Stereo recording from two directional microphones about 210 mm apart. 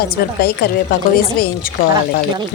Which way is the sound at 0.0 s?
45° left (ahead or behind).